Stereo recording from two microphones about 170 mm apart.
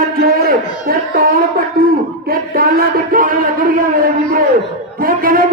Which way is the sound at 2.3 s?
60° right (ahead or behind).